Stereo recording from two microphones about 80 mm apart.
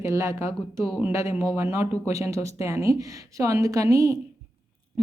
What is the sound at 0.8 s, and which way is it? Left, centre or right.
Speech, centre.